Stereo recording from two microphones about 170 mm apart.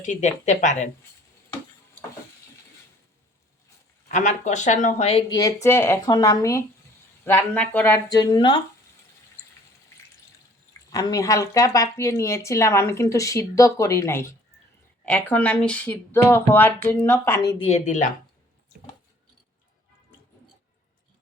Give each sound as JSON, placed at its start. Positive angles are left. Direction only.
{"t": 0.0, "sound": "speech", "side_deg": 45}
{"t": 4.1, "sound": "speech", "side_deg": 45}
{"t": 5.3, "sound": "a woman's voice", "side_deg": 20}
{"t": 8.1, "sound": "speech", "side_deg": 25}
{"t": 10.9, "sound": "a woman's voice", "side_deg": 20}
{"t": 17.7, "sound": "speech", "side_deg": 45}